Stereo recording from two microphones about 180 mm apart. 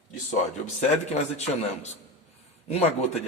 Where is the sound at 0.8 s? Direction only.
40° left (ahead or behind).